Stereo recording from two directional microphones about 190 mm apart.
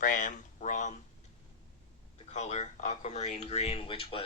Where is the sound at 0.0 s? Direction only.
45° left (ahead or behind).